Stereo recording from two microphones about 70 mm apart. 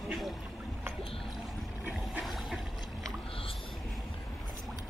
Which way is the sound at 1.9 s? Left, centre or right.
Centre.